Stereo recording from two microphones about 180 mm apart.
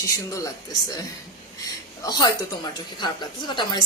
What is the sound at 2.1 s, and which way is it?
A woman's voice, 25° left (ahead or behind).